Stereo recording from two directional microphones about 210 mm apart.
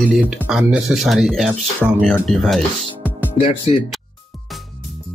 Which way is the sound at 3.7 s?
30° left (ahead or behind).